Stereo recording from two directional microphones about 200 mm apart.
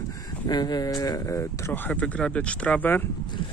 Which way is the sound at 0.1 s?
20° left (ahead or behind).